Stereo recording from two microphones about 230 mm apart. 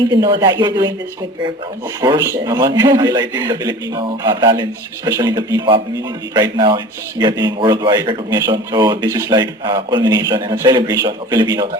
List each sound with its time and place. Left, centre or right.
0.1 s speech: centre
2.0 s a man's voice: centre